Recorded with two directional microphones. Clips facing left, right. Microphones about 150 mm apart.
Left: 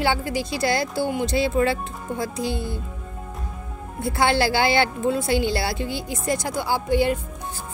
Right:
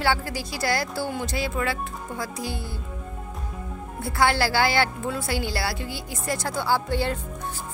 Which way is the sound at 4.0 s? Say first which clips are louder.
Left 2 dB; 20° left (ahead or behind).